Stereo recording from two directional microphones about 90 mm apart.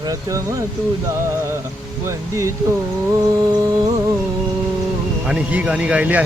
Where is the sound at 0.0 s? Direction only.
40° right (ahead or behind).